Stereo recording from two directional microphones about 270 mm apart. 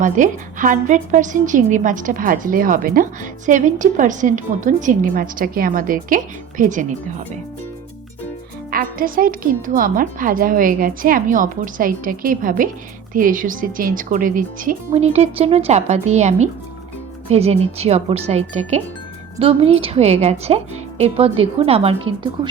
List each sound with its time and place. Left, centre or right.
0.0 s a woman's voice: right
8.7 s a woman's voice: right